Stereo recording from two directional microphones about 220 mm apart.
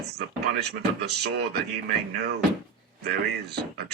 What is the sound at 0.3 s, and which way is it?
Speech, 50° right (ahead or behind).